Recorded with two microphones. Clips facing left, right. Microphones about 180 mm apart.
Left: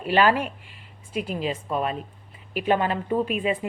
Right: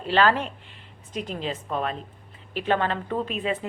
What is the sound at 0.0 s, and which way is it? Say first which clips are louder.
A woman's voice: left 1 dB; 10° left (ahead or behind).